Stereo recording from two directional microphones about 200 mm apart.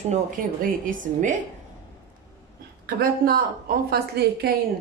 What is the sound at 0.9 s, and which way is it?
Speech, 40° right (ahead or behind).